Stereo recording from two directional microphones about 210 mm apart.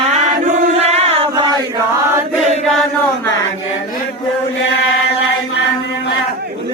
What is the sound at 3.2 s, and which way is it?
Chant, 15° left (ahead or behind).